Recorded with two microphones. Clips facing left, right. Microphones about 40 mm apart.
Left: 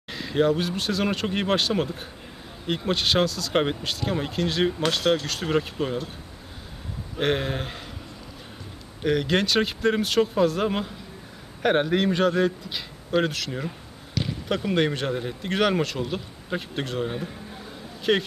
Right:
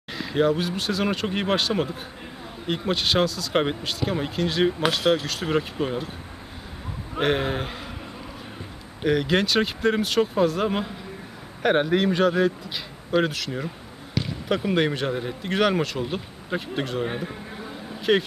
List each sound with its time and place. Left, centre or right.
0.1 s speech: centre
7.2 s speech: centre
9.0 s speech: centre
14.2 s basketball bounce: centre
14.5 s speech: centre
17.0 s a man's voice: centre
18.1 s speech: centre